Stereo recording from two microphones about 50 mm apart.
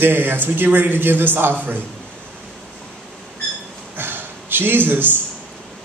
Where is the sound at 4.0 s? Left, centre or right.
Right.